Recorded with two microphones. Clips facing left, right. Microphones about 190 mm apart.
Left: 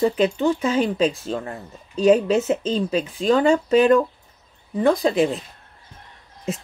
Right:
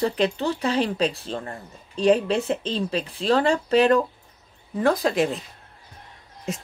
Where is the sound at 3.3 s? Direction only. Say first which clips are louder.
Left 3 dB; 35° right (ahead or behind).